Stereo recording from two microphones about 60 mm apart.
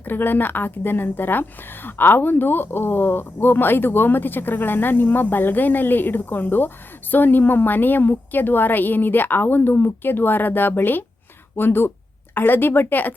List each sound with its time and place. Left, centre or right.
0.0 s a woman's voice: left